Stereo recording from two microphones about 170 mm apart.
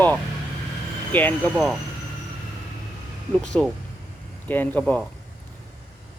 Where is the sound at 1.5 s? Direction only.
Centre (ahead or behind).